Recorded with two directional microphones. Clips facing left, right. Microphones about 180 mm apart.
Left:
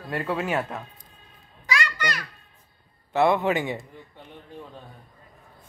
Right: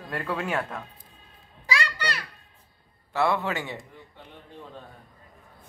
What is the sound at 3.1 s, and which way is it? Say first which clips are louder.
Speech: left 5 dB; 20° left (ahead or behind).